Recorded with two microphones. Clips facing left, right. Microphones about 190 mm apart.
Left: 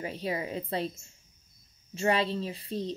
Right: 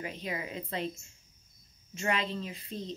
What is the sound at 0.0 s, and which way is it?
Speech, 30° left (ahead or behind).